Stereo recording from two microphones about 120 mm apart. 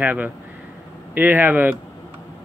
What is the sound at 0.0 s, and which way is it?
Speech, 15° right (ahead or behind).